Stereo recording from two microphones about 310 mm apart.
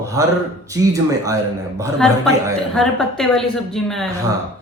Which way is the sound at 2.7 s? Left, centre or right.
Centre.